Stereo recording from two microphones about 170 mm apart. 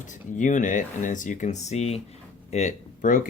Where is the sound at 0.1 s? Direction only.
45° left (ahead or behind).